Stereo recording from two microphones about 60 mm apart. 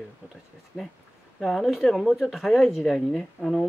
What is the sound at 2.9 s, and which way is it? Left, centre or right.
Speech, centre.